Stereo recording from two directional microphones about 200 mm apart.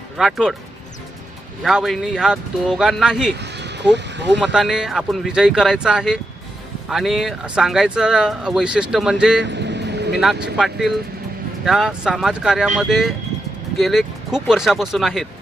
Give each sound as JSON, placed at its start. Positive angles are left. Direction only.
{"t": 0.2, "sound": "speech", "side_deg": 0}
{"t": 1.6, "sound": "speech", "side_deg": 0}
{"t": 3.3, "sound": "a sound", "side_deg": -60}
{"t": 3.9, "sound": "speech", "side_deg": -60}
{"t": 4.5, "sound": "speech", "side_deg": -5}
{"t": 9.4, "sound": "vehicle", "side_deg": -60}
{"t": 10.4, "sound": "speech", "side_deg": 0}